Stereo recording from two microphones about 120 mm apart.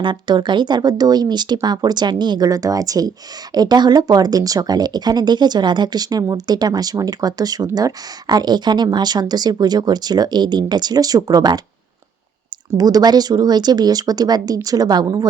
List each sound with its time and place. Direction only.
0.0 s speech: 40° right (ahead or behind)
12.7 s speech: 30° right (ahead or behind)